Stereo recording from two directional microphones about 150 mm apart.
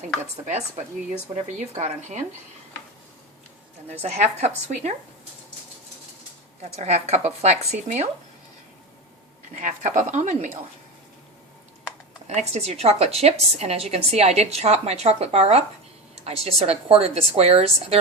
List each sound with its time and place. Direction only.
0.8 s a woman's voice: 45° right (ahead or behind)
4.0 s a woman's voice: 50° right (ahead or behind)
6.6 s a woman's voice: 45° right (ahead or behind)
9.6 s a woman's voice: 60° right (ahead or behind)
12.3 s a woman's voice: 50° right (ahead or behind)